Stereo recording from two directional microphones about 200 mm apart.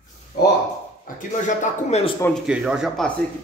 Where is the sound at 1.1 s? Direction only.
45° left (ahead or behind).